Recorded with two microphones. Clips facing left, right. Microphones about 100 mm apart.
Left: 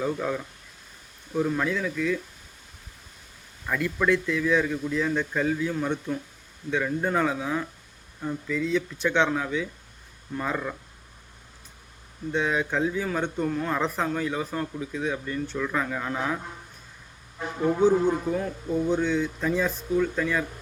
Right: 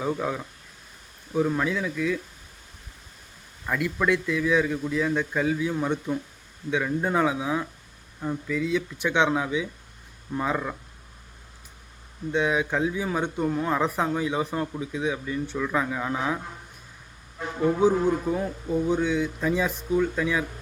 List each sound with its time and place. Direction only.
0.0 s speech: 10° right (ahead or behind)
3.7 s speech: 10° right (ahead or behind)
12.3 s speech: 10° right (ahead or behind)
17.6 s speech: 10° right (ahead or behind)